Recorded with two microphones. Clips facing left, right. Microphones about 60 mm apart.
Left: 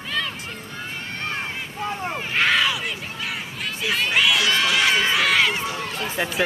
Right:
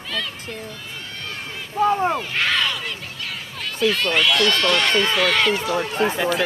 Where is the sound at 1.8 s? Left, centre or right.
Right.